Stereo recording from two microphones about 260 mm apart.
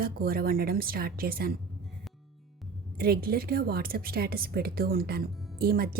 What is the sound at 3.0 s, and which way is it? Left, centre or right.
Speech, right.